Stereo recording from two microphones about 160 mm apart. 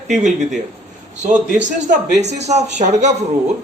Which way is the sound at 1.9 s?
45° right (ahead or behind).